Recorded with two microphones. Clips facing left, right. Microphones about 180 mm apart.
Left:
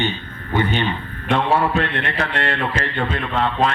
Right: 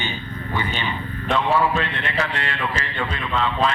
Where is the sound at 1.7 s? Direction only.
50° left (ahead or behind).